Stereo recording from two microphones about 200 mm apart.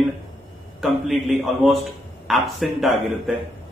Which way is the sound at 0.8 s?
Centre (ahead or behind).